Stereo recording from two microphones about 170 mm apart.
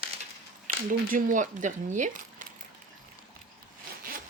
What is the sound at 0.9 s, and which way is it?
Speech, 50° right (ahead or behind).